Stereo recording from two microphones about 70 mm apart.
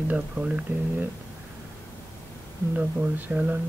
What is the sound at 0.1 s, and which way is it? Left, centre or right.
Speech, right.